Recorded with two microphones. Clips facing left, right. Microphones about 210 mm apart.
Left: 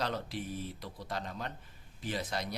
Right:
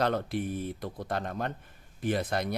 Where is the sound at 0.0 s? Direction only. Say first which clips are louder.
Right 8 dB; 55° right (ahead or behind).